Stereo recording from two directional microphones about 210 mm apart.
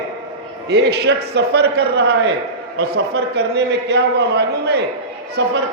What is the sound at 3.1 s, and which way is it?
A man's voice, 50° right (ahead or behind).